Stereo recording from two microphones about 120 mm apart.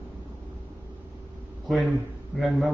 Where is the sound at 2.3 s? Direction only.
Centre (ahead or behind).